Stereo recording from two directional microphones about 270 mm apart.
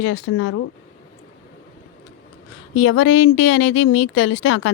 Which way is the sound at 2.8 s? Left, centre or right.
Left.